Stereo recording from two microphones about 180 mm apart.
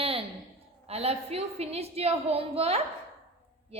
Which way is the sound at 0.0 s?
30° right (ahead or behind).